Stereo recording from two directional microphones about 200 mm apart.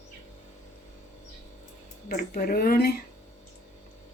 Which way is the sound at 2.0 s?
50° left (ahead or behind).